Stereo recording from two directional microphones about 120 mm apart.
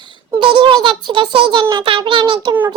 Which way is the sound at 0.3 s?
40° right (ahead or behind).